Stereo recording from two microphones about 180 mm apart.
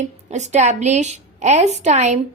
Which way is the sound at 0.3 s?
40° right (ahead or behind).